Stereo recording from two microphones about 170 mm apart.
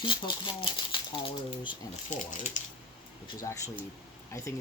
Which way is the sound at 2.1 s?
45° left (ahead or behind).